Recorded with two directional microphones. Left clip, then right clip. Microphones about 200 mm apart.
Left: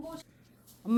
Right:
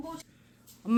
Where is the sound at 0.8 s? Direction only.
Centre (ahead or behind).